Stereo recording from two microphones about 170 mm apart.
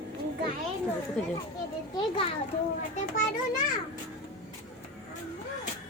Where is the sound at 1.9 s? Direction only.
30° left (ahead or behind).